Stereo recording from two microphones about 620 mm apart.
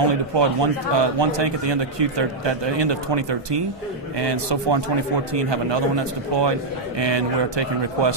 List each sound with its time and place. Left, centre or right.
0.1 s a man's voice: right